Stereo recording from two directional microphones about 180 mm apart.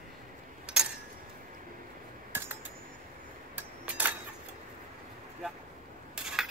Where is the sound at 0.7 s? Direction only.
5° right (ahead or behind).